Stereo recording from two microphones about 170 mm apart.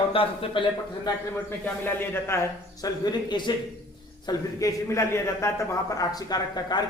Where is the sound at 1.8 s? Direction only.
10° left (ahead or behind).